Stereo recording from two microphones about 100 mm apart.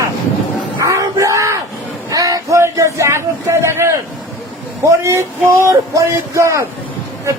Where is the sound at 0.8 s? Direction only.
30° right (ahead or behind).